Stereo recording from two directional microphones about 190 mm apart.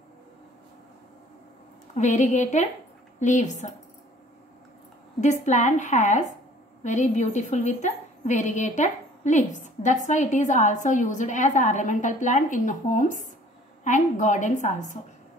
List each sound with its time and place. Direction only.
2.0 s a woman's voice: 40° left (ahead or behind)
5.2 s a woman's voice: 40° left (ahead or behind)